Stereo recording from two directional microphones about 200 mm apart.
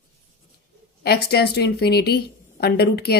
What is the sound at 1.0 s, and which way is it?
Speech, 50° left (ahead or behind).